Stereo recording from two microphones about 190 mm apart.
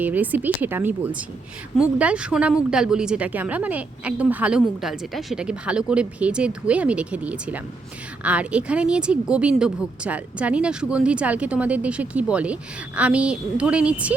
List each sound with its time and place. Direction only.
0.0 s a woman's voice: 10° right (ahead or behind)